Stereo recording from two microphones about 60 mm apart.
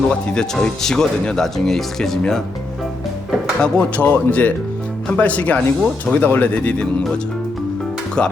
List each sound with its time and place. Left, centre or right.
0.3 s speech: centre
3.6 s speech: left
8.2 s speech: centre